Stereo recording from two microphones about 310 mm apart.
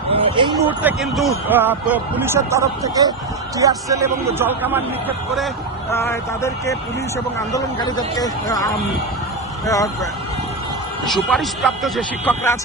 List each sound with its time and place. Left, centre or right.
0.1 s a sound: centre
0.8 s speech: centre
5.9 s speech: centre